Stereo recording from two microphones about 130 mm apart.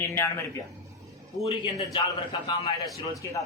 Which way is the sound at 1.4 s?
25° right (ahead or behind).